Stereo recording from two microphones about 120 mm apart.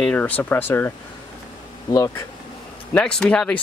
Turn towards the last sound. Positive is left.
turn(degrees=10)  # may be behind; listen again after turning